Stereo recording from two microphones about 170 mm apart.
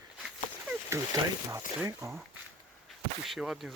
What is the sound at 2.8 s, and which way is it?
Speech, centre (ahead or behind).